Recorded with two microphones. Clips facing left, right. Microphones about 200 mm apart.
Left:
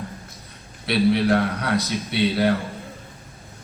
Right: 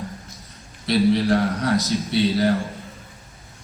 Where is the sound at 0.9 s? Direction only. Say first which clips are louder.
Right 1 dB; 60° left (ahead or behind).